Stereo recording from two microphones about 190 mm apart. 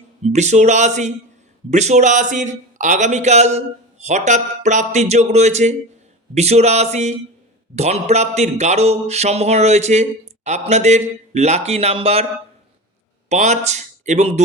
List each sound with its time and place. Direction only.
0.2 s speech: 35° right (ahead or behind)
13.2 s speech: 35° right (ahead or behind)